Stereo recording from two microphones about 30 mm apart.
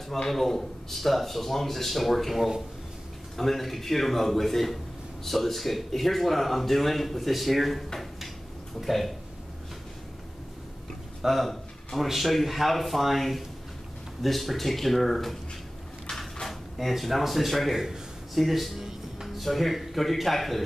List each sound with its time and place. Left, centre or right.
0.3 s a man's voice: centre
8.8 s a man's voice: centre
11.2 s a man's voice: centre
16.7 s a man's voice: centre
17.7 s a man's voice: centre
18.3 s speech: centre